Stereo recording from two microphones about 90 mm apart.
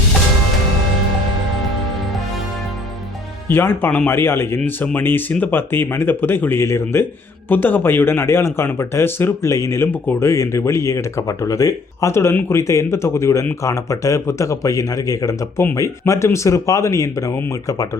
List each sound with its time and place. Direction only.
3.5 s speech: 25° left (ahead or behind)